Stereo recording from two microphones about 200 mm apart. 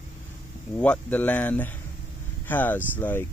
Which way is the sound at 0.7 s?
5° left (ahead or behind).